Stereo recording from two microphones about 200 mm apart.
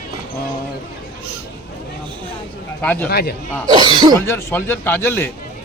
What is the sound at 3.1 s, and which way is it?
Speech, 50° left (ahead or behind).